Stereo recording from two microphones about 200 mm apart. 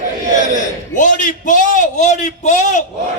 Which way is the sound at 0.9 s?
40° left (ahead or behind).